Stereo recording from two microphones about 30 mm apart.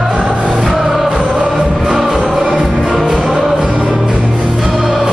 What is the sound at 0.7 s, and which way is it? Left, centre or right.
Music, centre.